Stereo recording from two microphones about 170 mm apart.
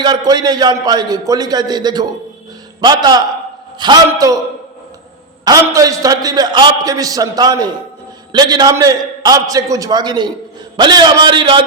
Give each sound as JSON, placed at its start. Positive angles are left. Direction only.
{"t": 0.0, "sound": "a man's voice", "side_deg": -25}
{"t": 5.5, "sound": "a man's voice", "side_deg": -20}